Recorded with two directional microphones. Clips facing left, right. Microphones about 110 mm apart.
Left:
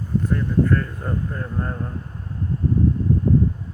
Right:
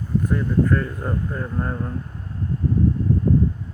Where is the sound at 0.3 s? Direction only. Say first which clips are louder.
Even; 5° right (ahead or behind).